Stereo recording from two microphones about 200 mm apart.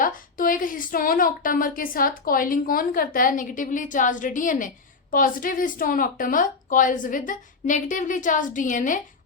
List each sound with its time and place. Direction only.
0.0 s a woman's voice: 45° left (ahead or behind)